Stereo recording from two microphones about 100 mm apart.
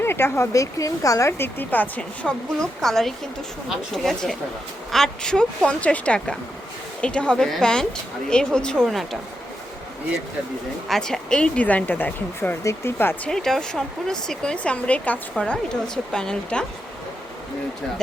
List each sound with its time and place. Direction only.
0.0 s speech: 25° left (ahead or behind); by 9.0 s centre (ahead or behind)
10.8 s speech: 5° left (ahead or behind); by 13.3 s 20° left (ahead or behind)
13.3 s speech: 5° left (ahead or behind)